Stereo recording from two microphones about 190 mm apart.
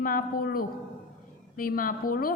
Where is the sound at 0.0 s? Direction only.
50° left (ahead or behind).